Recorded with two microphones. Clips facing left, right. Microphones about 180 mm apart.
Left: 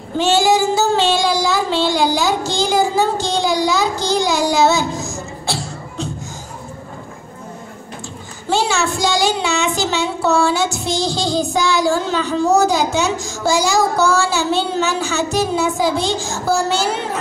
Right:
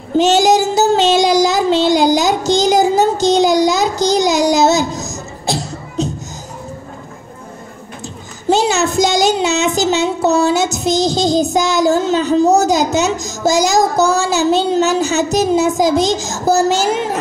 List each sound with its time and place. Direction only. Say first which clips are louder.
0.2 s child singing: right 3 dB; 40° right (ahead or behind)
8.5 s a woman's voice: right 4 dB; 40° right (ahead or behind)